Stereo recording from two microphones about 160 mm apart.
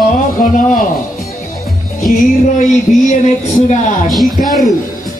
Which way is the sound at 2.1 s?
55° left (ahead or behind).